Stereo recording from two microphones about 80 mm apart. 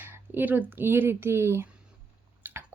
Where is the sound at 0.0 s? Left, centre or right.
Right.